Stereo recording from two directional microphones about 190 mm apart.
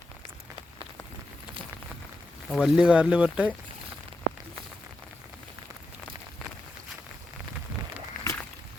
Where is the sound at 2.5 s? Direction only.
Centre (ahead or behind).